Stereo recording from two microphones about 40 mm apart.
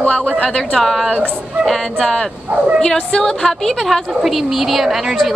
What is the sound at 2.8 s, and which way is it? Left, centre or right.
A woman's voice, centre.